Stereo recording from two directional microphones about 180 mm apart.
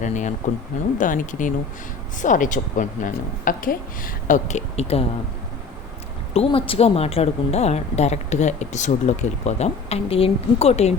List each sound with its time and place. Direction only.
0.0 s a woman's voice: 45° left (ahead or behind)
6.3 s a woman's voice: 30° left (ahead or behind)